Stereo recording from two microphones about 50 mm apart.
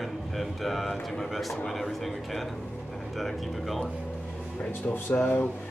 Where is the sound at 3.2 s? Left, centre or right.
Centre.